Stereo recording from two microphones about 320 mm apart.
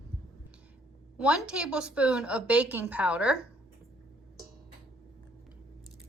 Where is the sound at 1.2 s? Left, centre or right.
Centre.